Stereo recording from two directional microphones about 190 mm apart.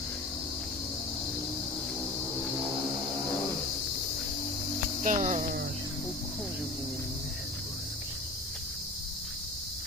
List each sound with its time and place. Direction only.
5.0 s cricket: 40° right (ahead or behind)